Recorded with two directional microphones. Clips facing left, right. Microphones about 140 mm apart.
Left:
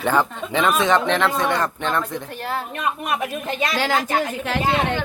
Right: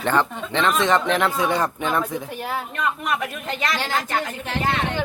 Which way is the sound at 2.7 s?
20° left (ahead or behind).